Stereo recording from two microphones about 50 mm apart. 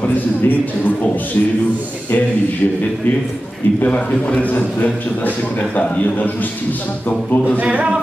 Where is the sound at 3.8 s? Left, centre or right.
Left.